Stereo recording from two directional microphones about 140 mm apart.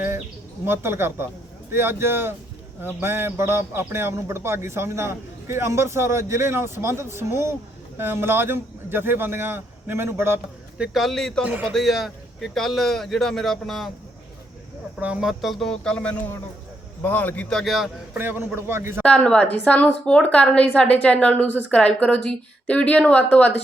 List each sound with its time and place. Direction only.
0.6 s speech: 15° right (ahead or behind); by 11.4 s 5° left (ahead or behind)
11.4 s speech: 10° right (ahead or behind)
11.7 s speech: centre (ahead or behind)
15.0 s a woman's voice: 5° right (ahead or behind)
18.2 s speech: 15° right (ahead or behind)
19.0 s a woman's voice: 10° left (ahead or behind)